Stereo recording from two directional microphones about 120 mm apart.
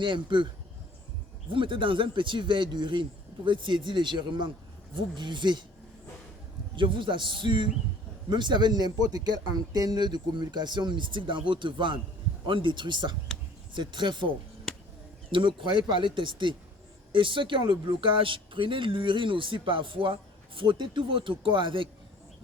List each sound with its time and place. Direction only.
0.0 s speech: 40° right (ahead or behind)
1.5 s a man's voice: 45° right (ahead or behind)
6.7 s a man's voice: 45° right (ahead or behind)